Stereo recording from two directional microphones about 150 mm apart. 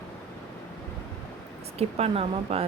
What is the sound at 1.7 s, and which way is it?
Speech, 40° right (ahead or behind).